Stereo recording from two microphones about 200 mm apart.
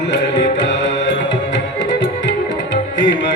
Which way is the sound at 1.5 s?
70° left (ahead or behind).